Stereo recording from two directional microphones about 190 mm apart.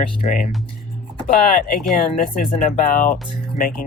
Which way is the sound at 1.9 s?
45° left (ahead or behind).